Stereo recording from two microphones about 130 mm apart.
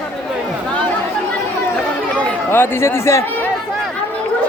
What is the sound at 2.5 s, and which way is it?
Speech, 20° left (ahead or behind).